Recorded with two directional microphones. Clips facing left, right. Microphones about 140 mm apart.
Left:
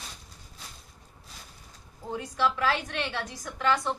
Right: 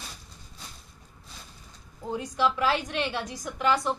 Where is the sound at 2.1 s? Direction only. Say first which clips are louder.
Right 2 dB; 15° right (ahead or behind).